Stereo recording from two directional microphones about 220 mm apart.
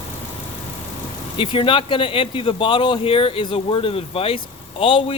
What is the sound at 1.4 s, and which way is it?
Speech, 25° left (ahead or behind).